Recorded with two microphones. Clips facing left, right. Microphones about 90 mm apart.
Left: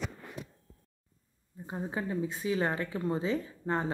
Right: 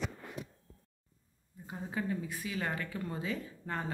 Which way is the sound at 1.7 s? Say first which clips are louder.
Left 2 dB; 30° left (ahead or behind).